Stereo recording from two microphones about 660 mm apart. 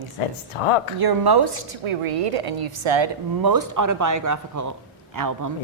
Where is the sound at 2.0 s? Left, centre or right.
Right.